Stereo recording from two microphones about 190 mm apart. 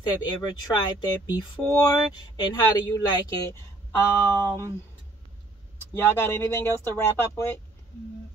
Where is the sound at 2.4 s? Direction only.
20° left (ahead or behind).